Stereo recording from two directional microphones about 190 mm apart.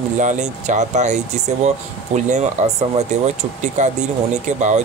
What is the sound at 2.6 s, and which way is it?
Speech, 35° right (ahead or behind).